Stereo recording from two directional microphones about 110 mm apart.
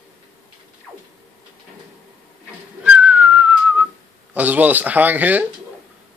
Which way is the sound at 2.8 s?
10° right (ahead or behind).